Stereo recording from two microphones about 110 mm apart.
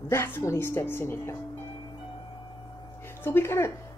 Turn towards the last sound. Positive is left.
turn(degrees=25)  # may be behind; listen again after turning